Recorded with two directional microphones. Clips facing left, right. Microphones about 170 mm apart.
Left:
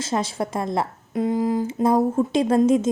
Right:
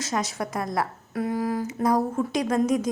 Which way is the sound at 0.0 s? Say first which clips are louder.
Left 4 dB; 30° left (ahead or behind).